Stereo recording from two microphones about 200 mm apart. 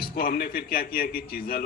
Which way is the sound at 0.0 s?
50° left (ahead or behind).